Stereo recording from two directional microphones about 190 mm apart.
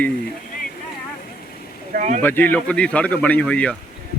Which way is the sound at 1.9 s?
40° right (ahead or behind).